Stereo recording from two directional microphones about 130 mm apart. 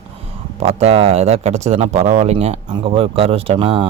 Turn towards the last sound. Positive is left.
turn(degrees=-45)  # may be behind; listen again after turning